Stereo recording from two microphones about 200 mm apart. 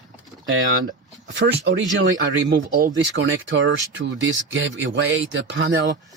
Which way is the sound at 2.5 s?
45° right (ahead or behind).